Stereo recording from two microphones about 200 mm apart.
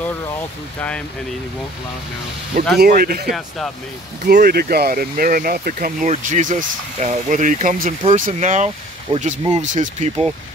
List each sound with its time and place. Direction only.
0.7 s speech: 5° left (ahead or behind)
2.6 s speech: 45° right (ahead or behind)
3.3 s speech: centre (ahead or behind)
4.3 s speech: 50° right (ahead or behind); by 10.2 s 35° right (ahead or behind)